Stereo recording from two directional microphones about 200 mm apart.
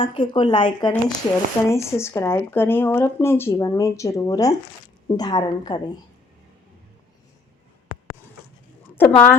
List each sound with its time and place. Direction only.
0.0 s speech: 25° left (ahead or behind)
9.0 s speech: 10° left (ahead or behind)